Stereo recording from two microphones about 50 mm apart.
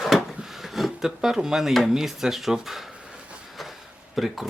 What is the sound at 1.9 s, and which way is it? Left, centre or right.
Speech, centre.